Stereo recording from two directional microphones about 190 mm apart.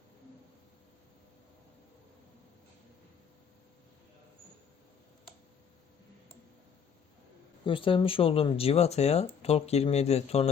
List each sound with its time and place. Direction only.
7.6 s speech: 25° left (ahead or behind)